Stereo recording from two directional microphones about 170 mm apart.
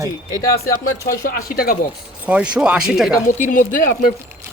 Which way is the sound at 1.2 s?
60° left (ahead or behind).